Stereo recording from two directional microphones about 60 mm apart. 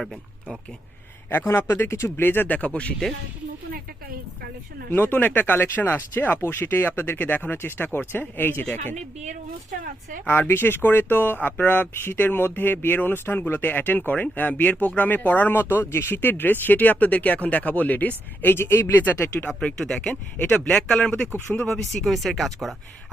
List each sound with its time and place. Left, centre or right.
1.5 s speech: left
2.2 s speech: left
2.6 s speech: left
4.9 s speech: left
10.2 s speech: left
18.4 s speech: left
19.0 s speech: left
20.1 s speech: centre
21.3 s speech: left
21.6 s speech: centre